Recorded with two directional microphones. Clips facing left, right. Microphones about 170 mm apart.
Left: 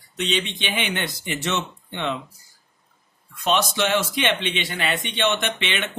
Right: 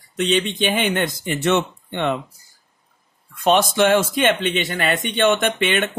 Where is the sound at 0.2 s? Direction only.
45° right (ahead or behind).